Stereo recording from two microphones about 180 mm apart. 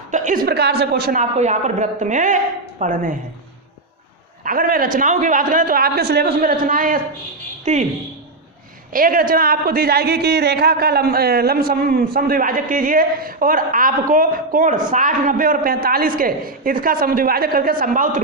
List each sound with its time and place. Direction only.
0.1 s a woman's voice: 45° right (ahead or behind)
0.4 s a woman's voice: 65° right (ahead or behind)
1.2 s a man's voice: 40° right (ahead or behind)
4.4 s a man's voice: 50° right (ahead or behind)
8.9 s a woman's voice: 50° right (ahead or behind)